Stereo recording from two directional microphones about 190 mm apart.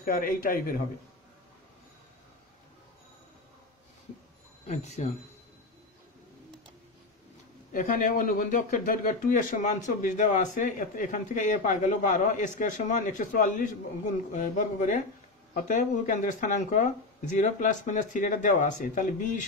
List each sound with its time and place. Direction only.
0.0 s speech: 45° left (ahead or behind)
4.6 s speech: 35° left (ahead or behind)
7.7 s speech: 45° left (ahead or behind)